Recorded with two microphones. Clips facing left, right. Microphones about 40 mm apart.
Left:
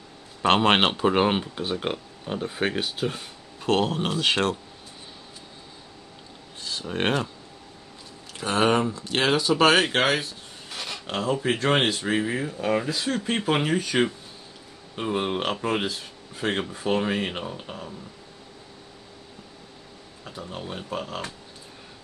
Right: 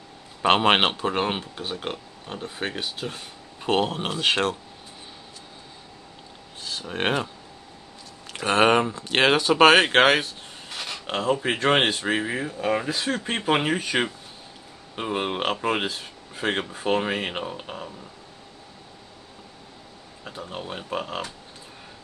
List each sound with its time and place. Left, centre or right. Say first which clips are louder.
0.4 s speech: right 1 dB; centre
0.9 s speech: left 4 dB; centre
3.8 s speech: even; centre
6.6 s speech: even; centre
8.4 s speech: right 3 dB; right
9.6 s speech: right 5 dB; right
10.7 s rub: right 1 dB; centre
12.0 s speech: even; centre
12.8 s speech: even; right
20.2 s speech: right 1 dB; centre